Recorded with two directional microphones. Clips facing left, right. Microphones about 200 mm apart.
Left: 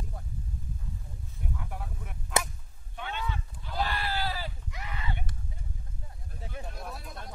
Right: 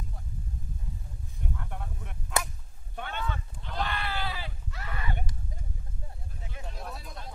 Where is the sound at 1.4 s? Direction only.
5° left (ahead or behind).